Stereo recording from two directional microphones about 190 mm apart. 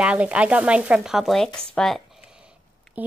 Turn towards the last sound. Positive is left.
turn(degrees=-10)  # may be behind; listen again after turning